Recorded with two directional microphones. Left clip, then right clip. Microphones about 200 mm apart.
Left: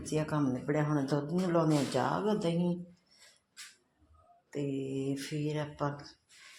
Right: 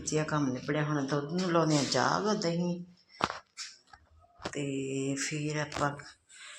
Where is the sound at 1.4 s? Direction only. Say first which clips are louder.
Right 2 dB; 5° left (ahead or behind).